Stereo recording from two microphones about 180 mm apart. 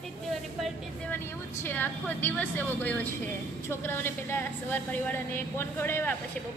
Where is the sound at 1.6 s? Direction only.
10° left (ahead or behind).